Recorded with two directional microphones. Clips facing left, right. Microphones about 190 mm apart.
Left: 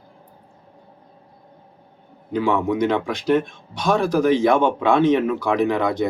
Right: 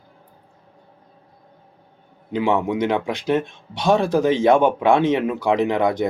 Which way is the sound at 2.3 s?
20° right (ahead or behind).